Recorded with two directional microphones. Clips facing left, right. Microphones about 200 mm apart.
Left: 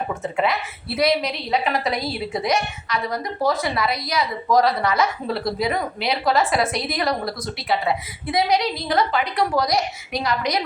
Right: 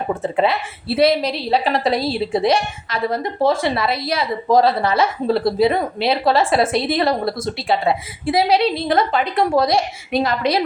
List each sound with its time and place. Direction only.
0.2 s a woman's voice: 30° right (ahead or behind)